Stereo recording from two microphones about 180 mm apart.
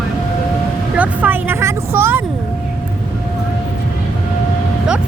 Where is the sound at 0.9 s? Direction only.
10° right (ahead or behind).